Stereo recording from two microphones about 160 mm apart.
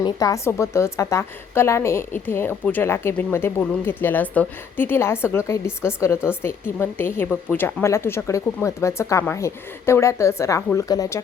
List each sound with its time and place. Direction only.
0.0 s a woman's voice: 20° left (ahead or behind)